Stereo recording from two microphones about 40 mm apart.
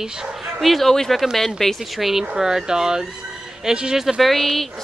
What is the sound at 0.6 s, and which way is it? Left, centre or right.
Speech, centre.